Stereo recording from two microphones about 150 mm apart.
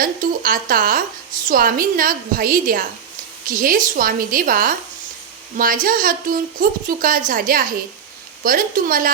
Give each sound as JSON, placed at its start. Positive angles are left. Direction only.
{"t": 0.0, "sound": "a woman's voice", "side_deg": -65}